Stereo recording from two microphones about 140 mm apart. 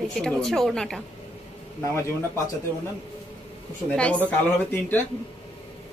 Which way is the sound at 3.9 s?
10° left (ahead or behind).